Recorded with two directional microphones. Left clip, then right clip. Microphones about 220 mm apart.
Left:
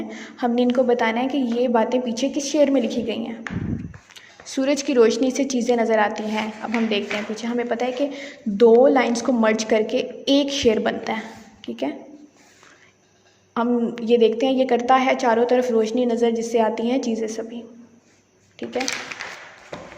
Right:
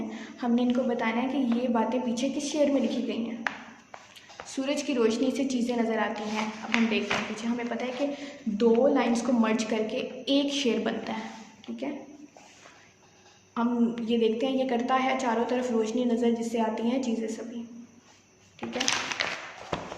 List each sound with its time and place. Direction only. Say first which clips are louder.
0.1 s a woman's voice: left 7 dB; 35° left (ahead or behind)
4.4 s a woman's voice: left 8 dB; 30° left (ahead or behind)
13.5 s a woman's voice: left 6 dB; 35° left (ahead or behind)
18.6 s a woman's voice: left 5 dB; 35° left (ahead or behind)